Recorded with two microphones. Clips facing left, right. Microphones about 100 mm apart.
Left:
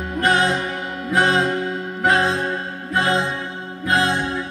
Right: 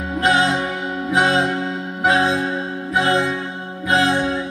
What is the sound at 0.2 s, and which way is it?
Music, 20° right (ahead or behind).